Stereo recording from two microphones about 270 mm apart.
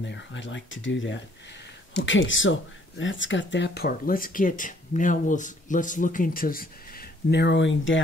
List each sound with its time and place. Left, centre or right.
0.0 s speech: left